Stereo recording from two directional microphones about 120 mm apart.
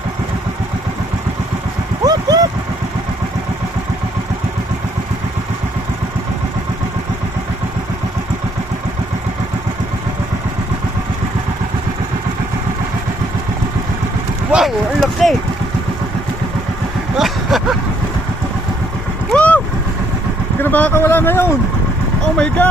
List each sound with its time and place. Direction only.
2.0 s vehicle: 30° right (ahead or behind)
14.5 s a sound: centre (ahead or behind)
17.2 s vehicle: centre (ahead or behind)
19.3 s boat: 10° left (ahead or behind)
20.6 s speech: 15° left (ahead or behind)